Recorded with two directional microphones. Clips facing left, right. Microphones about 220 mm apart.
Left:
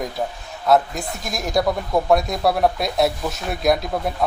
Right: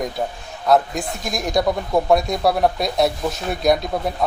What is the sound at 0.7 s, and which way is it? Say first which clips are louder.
Speech: right 1 dB; centre (ahead or behind).